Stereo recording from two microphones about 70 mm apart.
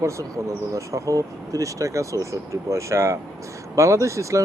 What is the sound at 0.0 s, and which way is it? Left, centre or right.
Speech, right.